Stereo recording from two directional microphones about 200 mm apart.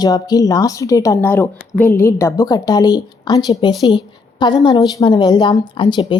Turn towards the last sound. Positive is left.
turn(degrees=25)  # may be behind; listen again after turning